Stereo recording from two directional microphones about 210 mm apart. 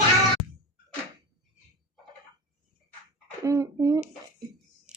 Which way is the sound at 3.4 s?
15° right (ahead or behind).